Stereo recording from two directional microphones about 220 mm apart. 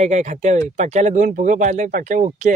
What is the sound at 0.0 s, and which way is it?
Speech, 30° right (ahead or behind).